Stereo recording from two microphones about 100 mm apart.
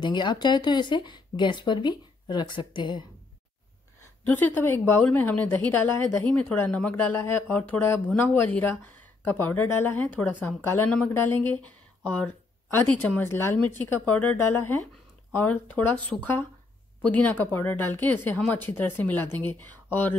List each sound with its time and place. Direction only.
0.0 s speech: 50° left (ahead or behind)
4.3 s a woman's voice: 20° left (ahead or behind)